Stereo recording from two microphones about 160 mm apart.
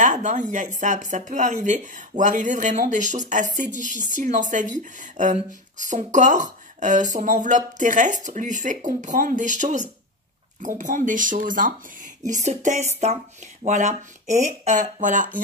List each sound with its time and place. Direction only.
0.0 s a woman's voice: 50° right (ahead or behind)